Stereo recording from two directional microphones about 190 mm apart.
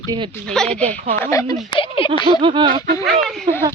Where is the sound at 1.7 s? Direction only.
30° left (ahead or behind).